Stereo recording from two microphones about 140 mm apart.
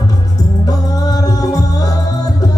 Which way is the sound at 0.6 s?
25° left (ahead or behind).